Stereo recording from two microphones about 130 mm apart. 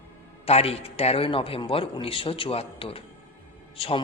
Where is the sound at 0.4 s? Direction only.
50° left (ahead or behind).